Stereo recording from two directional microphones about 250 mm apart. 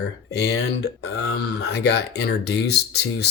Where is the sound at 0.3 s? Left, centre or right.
Left.